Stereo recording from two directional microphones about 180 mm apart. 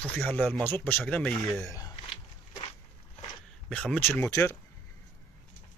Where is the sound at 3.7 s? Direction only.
10° left (ahead or behind).